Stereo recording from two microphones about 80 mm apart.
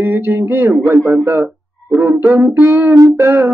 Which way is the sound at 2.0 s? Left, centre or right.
Right.